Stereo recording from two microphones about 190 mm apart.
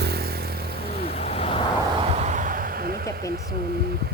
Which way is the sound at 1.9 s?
35° right (ahead or behind).